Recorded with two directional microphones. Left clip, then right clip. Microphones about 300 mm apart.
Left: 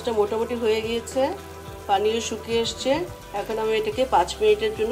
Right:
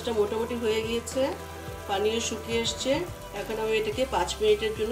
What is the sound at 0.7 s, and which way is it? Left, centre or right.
Speech, centre.